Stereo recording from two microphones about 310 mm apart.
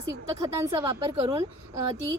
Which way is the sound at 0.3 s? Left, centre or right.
Centre.